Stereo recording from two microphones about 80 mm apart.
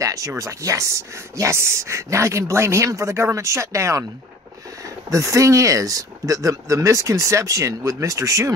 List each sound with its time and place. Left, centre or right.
0.0 s speech: right